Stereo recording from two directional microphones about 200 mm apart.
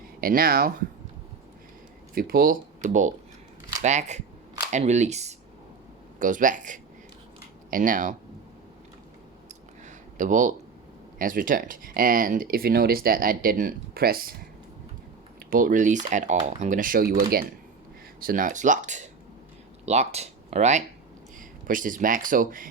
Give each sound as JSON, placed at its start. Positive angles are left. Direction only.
{"t": 0.2, "sound": "speech", "side_deg": -45}
{"t": 2.1, "sound": "speech", "side_deg": -45}
{"t": 9.8, "sound": "a sound", "side_deg": -40}
{"t": 11.2, "sound": "speech", "side_deg": -45}
{"t": 15.4, "sound": "speech", "side_deg": -45}
{"t": 18.2, "sound": "speech", "side_deg": -45}